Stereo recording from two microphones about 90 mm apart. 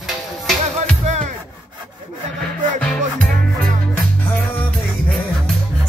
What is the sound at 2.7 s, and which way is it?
Music, 10° left (ahead or behind).